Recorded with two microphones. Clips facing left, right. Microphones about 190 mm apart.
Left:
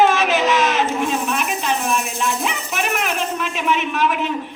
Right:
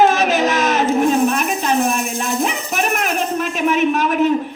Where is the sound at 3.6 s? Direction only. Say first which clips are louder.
Right 4 dB; 40° right (ahead or behind).